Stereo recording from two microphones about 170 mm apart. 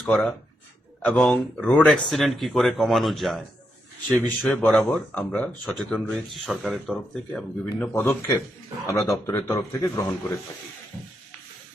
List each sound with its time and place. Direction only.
0.0 s a man's voice: 10° left (ahead or behind)